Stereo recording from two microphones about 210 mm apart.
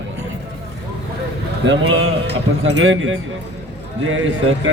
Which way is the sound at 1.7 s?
65° right (ahead or behind).